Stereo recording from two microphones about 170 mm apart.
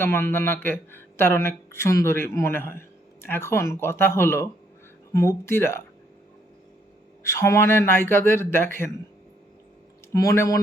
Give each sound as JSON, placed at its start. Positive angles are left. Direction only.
{"t": 0.0, "sound": "speech", "side_deg": 10}
{"t": 7.2, "sound": "speech", "side_deg": 15}
{"t": 10.1, "sound": "speech", "side_deg": 20}